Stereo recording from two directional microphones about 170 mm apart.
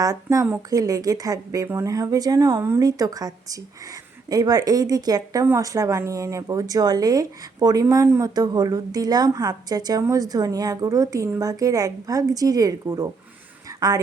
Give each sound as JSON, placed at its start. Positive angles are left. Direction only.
{"t": 0.0, "sound": "a woman's voice", "side_deg": -20}